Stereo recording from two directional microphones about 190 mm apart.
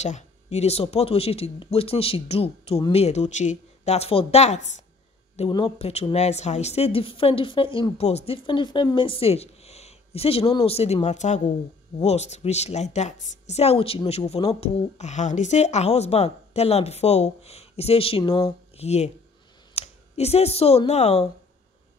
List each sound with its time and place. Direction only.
0.0 s a woman's voice: 35° left (ahead or behind)